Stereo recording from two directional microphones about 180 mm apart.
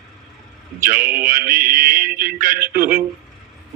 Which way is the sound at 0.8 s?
50° right (ahead or behind).